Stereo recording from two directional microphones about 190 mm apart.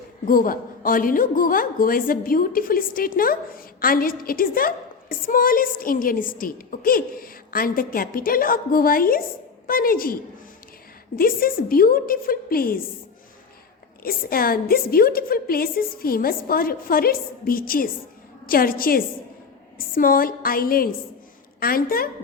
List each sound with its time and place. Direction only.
0.3 s a woman's voice: 50° left (ahead or behind)
11.2 s a woman's voice: 50° left (ahead or behind)
14.0 s a woman's voice: 50° left (ahead or behind)